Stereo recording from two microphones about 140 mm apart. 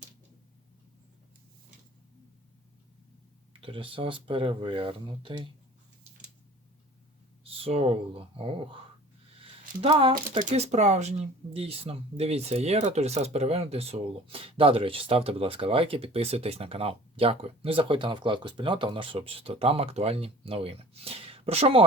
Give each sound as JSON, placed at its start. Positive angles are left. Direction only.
{"t": 3.6, "sound": "speech", "side_deg": -40}
{"t": 7.4, "sound": "speech", "side_deg": -40}
{"t": 11.5, "sound": "speech", "side_deg": -45}